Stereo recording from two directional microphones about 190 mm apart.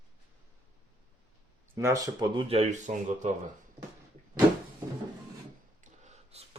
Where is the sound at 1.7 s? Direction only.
15° right (ahead or behind); by 3.3 s 40° right (ahead or behind).